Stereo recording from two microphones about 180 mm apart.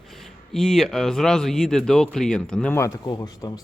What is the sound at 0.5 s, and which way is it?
A man's voice, centre (ahead or behind).